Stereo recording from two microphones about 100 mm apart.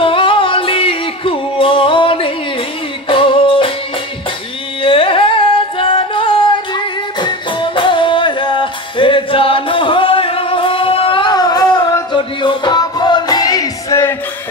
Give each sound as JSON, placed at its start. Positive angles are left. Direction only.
{"t": 0.0, "sound": "yodeling", "side_deg": 60}
{"t": 3.1, "sound": "music", "side_deg": 60}
{"t": 4.8, "sound": "singing", "side_deg": 65}
{"t": 11.3, "sound": "music", "side_deg": 40}